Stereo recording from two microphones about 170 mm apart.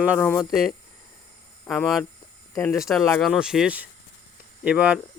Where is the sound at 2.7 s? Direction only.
Centre (ahead or behind).